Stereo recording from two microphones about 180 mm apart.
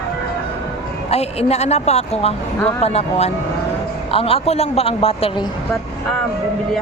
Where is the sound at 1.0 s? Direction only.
35° left (ahead or behind).